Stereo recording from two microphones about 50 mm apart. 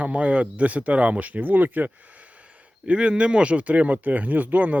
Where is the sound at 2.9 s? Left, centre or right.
Right.